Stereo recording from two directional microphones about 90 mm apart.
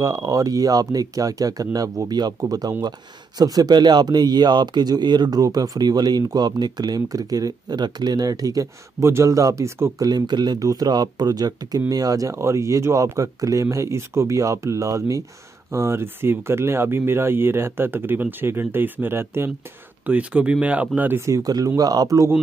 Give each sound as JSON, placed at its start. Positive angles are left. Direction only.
{"t": 0.0, "sound": "speech", "side_deg": -40}
{"t": 20.1, "sound": "speech", "side_deg": -15}
{"t": 21.3, "sound": "speech", "side_deg": -45}